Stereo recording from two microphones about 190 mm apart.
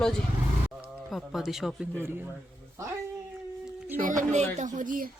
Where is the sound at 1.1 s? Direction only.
Centre (ahead or behind).